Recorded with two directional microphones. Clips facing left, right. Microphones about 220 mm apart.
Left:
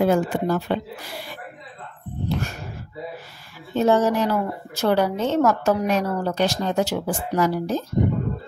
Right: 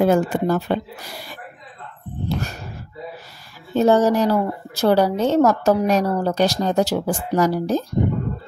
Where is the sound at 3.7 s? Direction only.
40° right (ahead or behind).